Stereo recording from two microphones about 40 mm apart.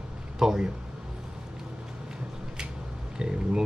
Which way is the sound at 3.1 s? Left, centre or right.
Centre.